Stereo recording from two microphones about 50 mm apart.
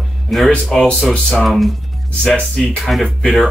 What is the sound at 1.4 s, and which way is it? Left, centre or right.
Speech, centre.